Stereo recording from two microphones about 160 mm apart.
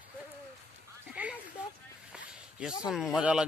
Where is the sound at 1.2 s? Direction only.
10° right (ahead or behind).